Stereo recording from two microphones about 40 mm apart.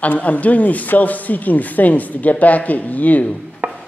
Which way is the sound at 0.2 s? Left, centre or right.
Left.